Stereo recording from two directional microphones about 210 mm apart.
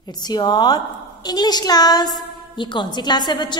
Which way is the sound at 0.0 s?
20° left (ahead or behind).